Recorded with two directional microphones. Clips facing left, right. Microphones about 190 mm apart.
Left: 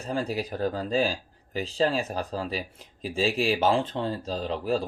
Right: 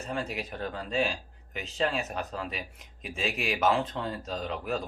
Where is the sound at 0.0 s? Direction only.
35° left (ahead or behind).